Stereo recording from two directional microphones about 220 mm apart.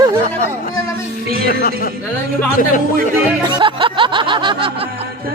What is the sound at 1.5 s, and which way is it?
Speech, 40° left (ahead or behind).